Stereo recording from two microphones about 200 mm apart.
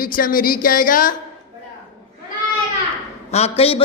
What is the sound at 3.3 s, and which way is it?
Speech, 30° left (ahead or behind).